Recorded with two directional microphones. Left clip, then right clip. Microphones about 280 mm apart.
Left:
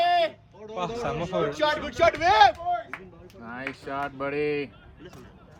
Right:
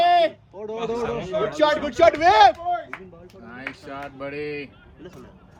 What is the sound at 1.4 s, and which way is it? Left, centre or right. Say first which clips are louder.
A man's voice: right 6 dB; right.